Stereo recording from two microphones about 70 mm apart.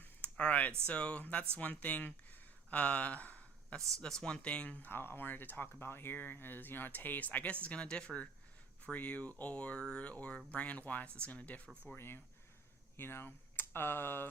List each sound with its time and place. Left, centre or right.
0.0 s a sound: centre
0.9 s speech: centre
3.8 s speech: right
4.0 s speech: centre
11.9 s speech: left